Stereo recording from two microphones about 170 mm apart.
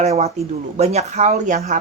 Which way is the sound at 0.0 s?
40° right (ahead or behind).